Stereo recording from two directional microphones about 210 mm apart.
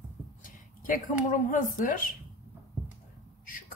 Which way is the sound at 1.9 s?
40° left (ahead or behind).